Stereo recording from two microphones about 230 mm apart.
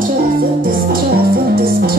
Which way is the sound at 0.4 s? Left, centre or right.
Right.